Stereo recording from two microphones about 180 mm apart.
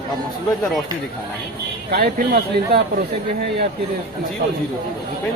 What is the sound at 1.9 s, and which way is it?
Speech, 55° right (ahead or behind).